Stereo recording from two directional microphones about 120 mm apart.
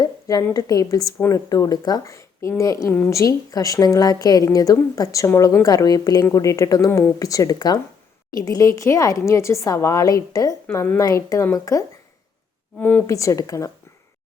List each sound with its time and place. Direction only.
0.0 s speech: 30° left (ahead or behind)